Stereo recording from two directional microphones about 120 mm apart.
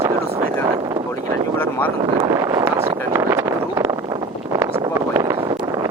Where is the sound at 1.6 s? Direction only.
15° left (ahead or behind).